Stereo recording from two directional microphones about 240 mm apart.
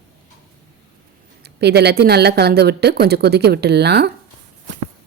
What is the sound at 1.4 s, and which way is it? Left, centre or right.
Speech, right.